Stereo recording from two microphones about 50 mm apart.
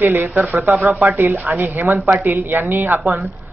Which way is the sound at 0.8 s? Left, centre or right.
Right.